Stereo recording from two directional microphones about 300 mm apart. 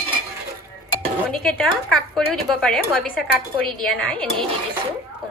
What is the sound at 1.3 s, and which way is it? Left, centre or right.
A woman's voice, centre.